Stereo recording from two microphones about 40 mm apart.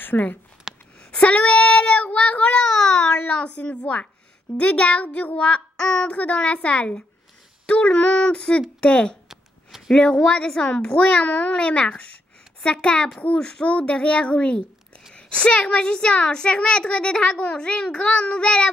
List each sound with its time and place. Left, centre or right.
0.0 s speech: left
0.7 s a sound: centre
1.1 s speech: left
2.8 s child singing: centre
3.1 s a child's voice: left
5.8 s a child's voice: centre
6.1 s a child's voice: left
9.3 s a sound: centre
9.9 s a child's voice: left